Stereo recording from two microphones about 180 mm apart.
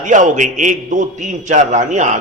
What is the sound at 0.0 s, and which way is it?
A man's voice, 45° right (ahead or behind).